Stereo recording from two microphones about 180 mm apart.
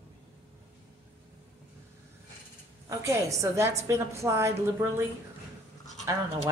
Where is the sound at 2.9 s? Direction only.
15° right (ahead or behind).